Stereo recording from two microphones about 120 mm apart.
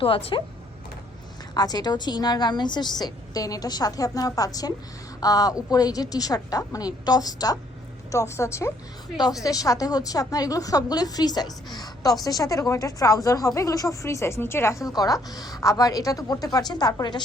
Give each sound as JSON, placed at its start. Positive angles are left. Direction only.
{"t": 0.0, "sound": "speech", "side_deg": 50}
{"t": 1.5, "sound": "a woman's voice", "side_deg": 35}